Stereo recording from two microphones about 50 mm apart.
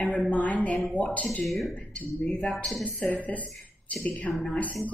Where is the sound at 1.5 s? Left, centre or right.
Centre.